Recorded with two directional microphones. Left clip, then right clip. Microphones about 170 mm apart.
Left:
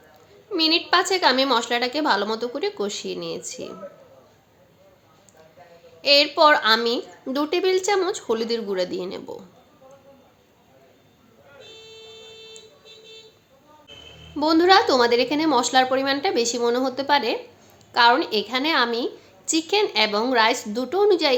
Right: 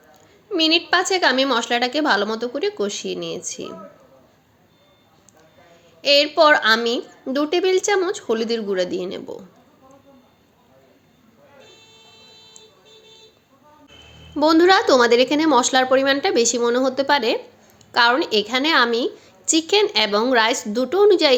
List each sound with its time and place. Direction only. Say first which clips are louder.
0.5 s a woman's voice: right 2 dB; 15° right (ahead or behind)
6.0 s a woman's voice: right 1 dB; 15° right (ahead or behind)
14.3 s a woman's voice: right 2 dB; 25° right (ahead or behind)